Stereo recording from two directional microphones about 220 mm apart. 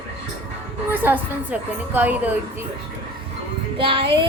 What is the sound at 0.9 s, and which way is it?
A woman's voice, 10° right (ahead or behind).